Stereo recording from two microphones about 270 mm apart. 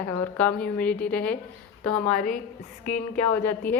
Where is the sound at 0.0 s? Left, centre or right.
Centre.